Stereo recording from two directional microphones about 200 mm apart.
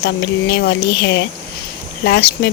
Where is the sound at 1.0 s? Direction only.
60° left (ahead or behind).